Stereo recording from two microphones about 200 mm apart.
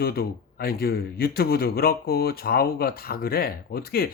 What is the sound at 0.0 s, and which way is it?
A man's voice, 50° left (ahead or behind).